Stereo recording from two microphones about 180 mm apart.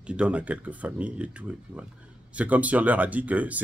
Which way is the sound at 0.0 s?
5° right (ahead or behind).